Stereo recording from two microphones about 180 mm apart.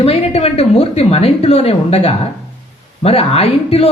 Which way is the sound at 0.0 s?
35° left (ahead or behind).